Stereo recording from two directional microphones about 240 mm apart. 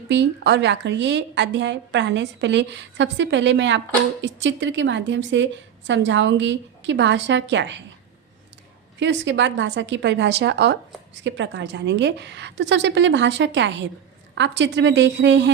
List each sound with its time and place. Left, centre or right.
0.1 s a woman's voice: right
9.0 s a woman's voice: right